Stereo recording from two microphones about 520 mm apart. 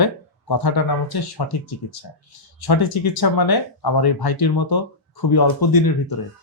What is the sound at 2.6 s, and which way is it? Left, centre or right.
Speech, left.